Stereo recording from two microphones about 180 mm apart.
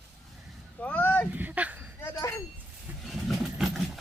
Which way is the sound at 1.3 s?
10° right (ahead or behind).